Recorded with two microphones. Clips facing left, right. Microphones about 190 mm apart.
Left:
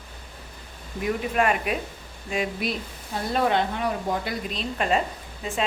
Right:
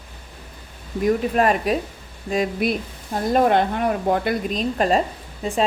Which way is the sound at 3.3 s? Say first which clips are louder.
Right 6 dB; 50° right (ahead or behind).